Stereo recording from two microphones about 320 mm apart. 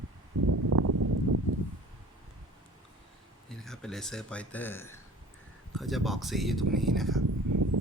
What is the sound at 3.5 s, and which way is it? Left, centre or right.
Speech, centre.